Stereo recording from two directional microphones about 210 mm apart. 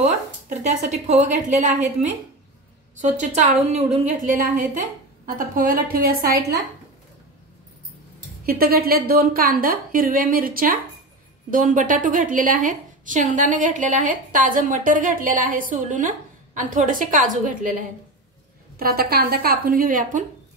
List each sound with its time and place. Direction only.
0.5 s a woman's voice: 35° right (ahead or behind)
4.3 s a woman's voice: 40° right (ahead or behind)
8.5 s a woman's voice: 45° right (ahead or behind)